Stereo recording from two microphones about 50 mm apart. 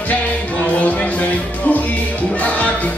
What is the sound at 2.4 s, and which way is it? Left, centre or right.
Music, left.